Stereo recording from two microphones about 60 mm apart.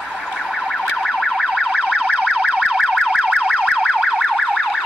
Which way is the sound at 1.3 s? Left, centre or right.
Centre.